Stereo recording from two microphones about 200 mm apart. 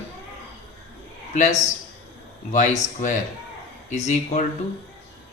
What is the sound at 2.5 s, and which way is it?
A man's voice, 40° left (ahead or behind).